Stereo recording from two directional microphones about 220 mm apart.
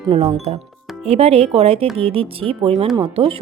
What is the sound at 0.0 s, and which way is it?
A woman's voice, 25° right (ahead or behind).